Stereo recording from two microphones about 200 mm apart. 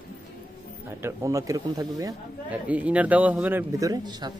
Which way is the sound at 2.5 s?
5° right (ahead or behind).